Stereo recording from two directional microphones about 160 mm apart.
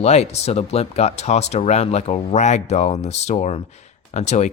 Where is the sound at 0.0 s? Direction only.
40° left (ahead or behind).